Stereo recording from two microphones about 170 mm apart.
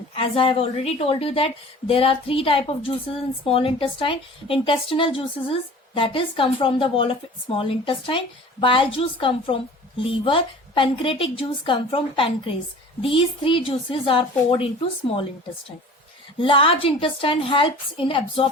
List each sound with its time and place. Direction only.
0.1 s a woman's voice: 30° left (ahead or behind)
16.4 s a woman's voice: 30° left (ahead or behind)